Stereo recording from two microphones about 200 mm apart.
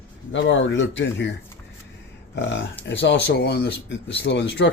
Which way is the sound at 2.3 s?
65° left (ahead or behind).